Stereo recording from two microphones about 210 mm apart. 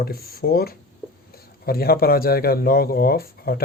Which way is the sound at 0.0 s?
45° left (ahead or behind).